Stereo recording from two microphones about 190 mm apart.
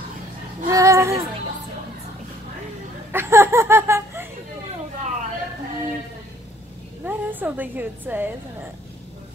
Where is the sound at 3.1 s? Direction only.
10° right (ahead or behind).